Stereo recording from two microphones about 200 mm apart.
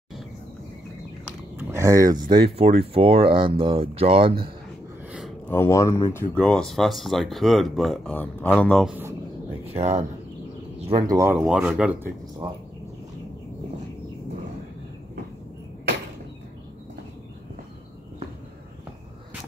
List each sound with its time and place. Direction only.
1.6 s speech: 15° right (ahead or behind); by 4.3 s 30° right (ahead or behind)
5.5 s speech: 15° left (ahead or behind)
6.3 s speech: 5° left (ahead or behind)
9.8 s speech: 35° right (ahead or behind)
11.1 s speech: 10° right (ahead or behind)
11.4 s speech: centre (ahead or behind)